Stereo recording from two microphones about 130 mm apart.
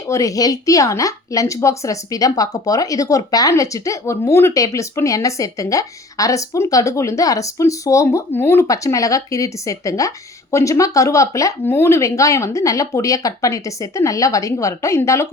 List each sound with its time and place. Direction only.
0.1 s a woman's voice: 25° left (ahead or behind)